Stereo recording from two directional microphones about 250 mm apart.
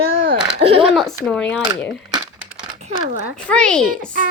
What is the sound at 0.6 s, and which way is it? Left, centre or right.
Speech, right.